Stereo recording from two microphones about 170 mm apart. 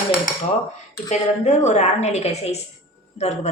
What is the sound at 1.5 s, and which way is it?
A woman's voice, 40° left (ahead or behind).